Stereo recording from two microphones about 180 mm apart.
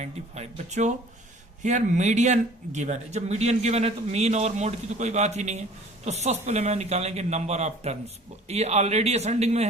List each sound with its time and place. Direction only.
0.0 s speech: 40° right (ahead or behind)